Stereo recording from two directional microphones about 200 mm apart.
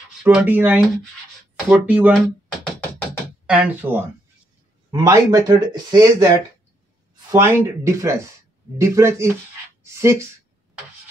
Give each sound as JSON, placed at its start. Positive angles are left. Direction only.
{"t": 0.2, "sound": "speech", "side_deg": -5}
{"t": 1.9, "sound": "speech", "side_deg": -5}
{"t": 3.4, "sound": "speech", "side_deg": -5}
{"t": 7.2, "sound": "speech", "side_deg": -15}